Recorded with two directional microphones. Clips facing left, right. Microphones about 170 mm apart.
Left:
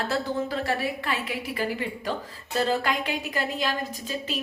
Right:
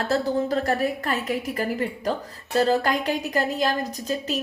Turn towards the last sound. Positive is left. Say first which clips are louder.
# right 5 dB
turn(degrees=-40)  # may be behind; listen again after turning